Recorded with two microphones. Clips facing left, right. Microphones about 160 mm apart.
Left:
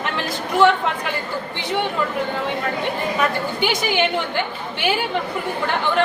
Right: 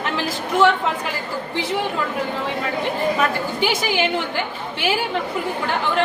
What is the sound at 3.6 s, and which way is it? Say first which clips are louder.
A woman's voice: even; centre (ahead or behind).